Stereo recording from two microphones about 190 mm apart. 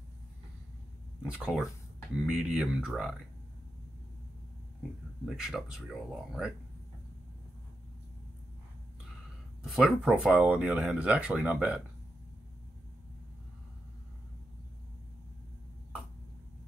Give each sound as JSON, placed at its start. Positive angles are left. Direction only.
{"t": 1.2, "sound": "speech", "side_deg": -5}
{"t": 5.2, "sound": "speech", "side_deg": 0}
{"t": 9.6, "sound": "speech", "side_deg": 0}